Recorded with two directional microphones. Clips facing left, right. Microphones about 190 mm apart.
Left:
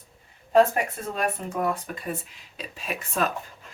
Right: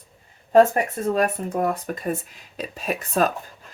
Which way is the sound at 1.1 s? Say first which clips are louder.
Right 5 dB; 40° right (ahead or behind).